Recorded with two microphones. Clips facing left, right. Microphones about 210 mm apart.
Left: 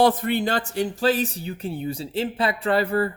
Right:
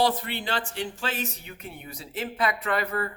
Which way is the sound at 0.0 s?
50° left (ahead or behind).